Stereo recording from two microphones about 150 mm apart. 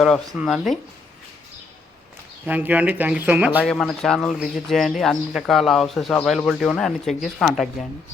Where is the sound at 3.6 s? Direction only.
5° left (ahead or behind).